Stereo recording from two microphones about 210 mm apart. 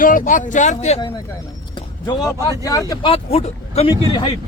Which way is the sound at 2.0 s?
20° left (ahead or behind).